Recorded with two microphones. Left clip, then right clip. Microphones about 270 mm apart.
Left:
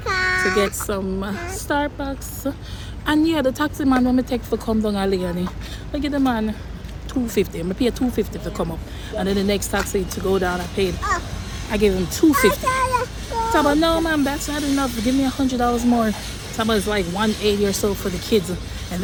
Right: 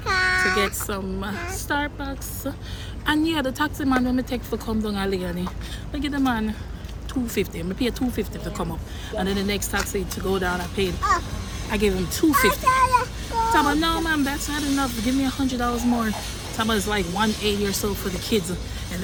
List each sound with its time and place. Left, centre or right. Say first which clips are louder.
0.0 s child singing: left 1 dB; centre
0.5 s speech: left 3 dB; centre
12.6 s child singing: right 1 dB; centre
13.5 s speech: left 4 dB; centre